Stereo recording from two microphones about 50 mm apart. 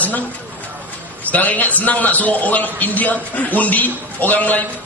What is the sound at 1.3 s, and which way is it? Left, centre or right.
A man's voice, left.